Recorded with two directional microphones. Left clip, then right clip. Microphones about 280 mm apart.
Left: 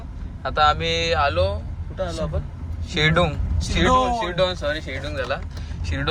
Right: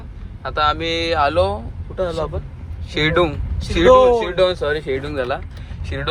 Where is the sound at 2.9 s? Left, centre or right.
Centre.